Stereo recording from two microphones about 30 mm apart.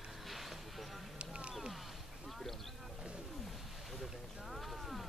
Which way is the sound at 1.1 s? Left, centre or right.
Right.